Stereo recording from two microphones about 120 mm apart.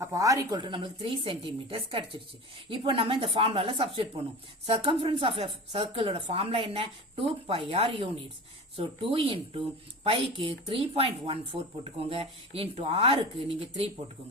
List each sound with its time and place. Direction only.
0.0 s speech: 30° right (ahead or behind)
0.6 s speech: 45° right (ahead or behind)